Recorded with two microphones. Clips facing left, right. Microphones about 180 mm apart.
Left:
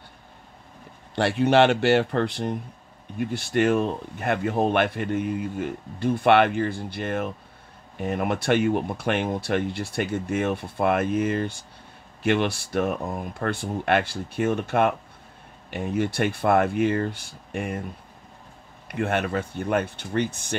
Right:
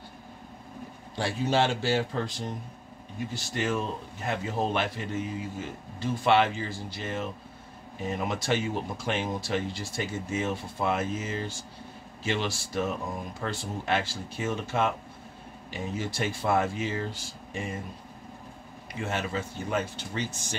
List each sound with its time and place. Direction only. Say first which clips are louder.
1.1 s speech: left 7 dB; 65° left (ahead or behind)
18.9 s speech: left 7 dB; 60° left (ahead or behind)